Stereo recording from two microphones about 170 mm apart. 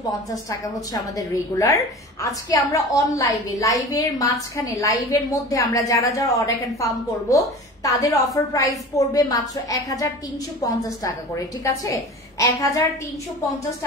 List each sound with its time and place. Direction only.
0.0 s a woman's voice: 20° left (ahead or behind)
11.3 s a woman's voice: 20° left (ahead or behind)